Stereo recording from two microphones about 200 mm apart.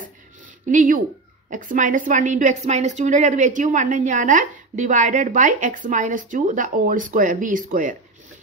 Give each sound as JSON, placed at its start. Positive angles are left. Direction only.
{"t": 0.7, "sound": "a woman's voice", "side_deg": -40}